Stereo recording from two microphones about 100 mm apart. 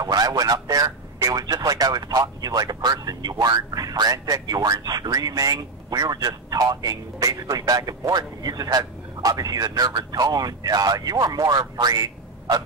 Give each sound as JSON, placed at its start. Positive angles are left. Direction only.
{"t": 0.0, "sound": "speech", "side_deg": -40}